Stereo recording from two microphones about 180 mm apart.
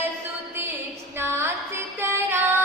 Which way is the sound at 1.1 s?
15° right (ahead or behind).